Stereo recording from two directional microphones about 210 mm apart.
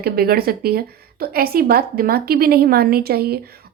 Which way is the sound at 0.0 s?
45° right (ahead or behind).